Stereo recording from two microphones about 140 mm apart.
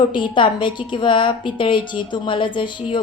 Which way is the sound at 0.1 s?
35° left (ahead or behind).